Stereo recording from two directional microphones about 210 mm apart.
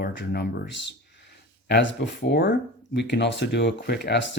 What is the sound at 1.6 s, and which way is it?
Speech, 55° left (ahead or behind).